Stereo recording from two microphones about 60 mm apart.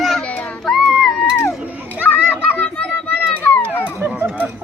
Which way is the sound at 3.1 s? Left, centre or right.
Left.